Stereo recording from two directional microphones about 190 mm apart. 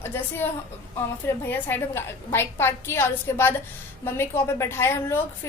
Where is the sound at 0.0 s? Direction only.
10° left (ahead or behind).